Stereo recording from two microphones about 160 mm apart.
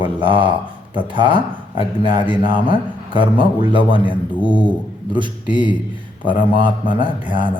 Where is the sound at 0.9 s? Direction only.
30° right (ahead or behind).